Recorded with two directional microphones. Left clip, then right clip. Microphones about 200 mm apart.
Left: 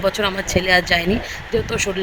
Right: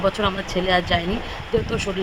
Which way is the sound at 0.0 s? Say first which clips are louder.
Left 2 dB; 25° left (ahead or behind).